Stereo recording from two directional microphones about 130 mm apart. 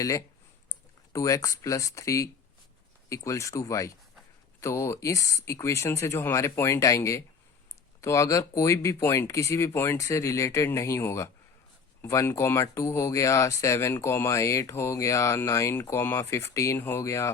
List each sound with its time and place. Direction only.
1.1 s speech: 25° left (ahead or behind)